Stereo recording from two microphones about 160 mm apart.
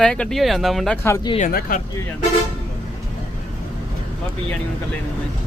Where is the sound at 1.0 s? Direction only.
20° left (ahead or behind).